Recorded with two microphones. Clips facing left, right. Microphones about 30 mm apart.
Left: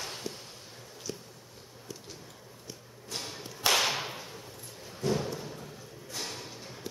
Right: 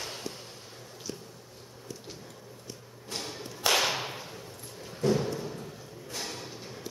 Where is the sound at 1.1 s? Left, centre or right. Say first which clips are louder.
Even; centre.